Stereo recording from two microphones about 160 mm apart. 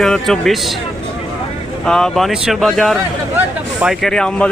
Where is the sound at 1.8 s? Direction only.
5° left (ahead or behind).